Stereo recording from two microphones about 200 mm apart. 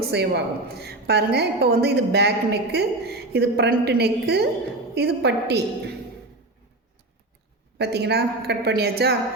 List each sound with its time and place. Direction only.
0.0 s a woman's voice: 55° right (ahead or behind)
7.8 s a woman's voice: 55° right (ahead or behind)